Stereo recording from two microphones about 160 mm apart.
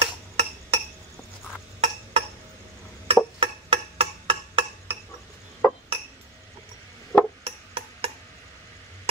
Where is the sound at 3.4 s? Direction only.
35° right (ahead or behind).